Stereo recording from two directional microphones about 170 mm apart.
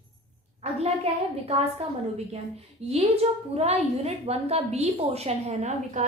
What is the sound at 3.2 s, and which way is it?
A woman's voice, 40° right (ahead or behind).